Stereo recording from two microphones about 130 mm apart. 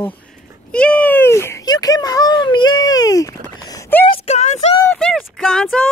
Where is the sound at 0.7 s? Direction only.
10° left (ahead or behind); by 3.3 s 25° left (ahead or behind).